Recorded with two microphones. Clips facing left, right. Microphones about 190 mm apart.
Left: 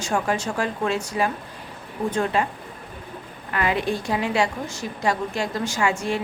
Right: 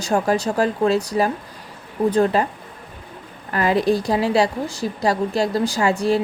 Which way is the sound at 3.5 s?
35° right (ahead or behind).